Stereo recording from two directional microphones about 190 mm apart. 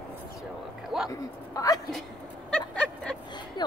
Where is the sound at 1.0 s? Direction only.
20° left (ahead or behind).